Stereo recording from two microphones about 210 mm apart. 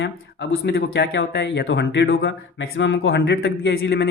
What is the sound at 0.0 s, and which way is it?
Speech, 55° left (ahead or behind).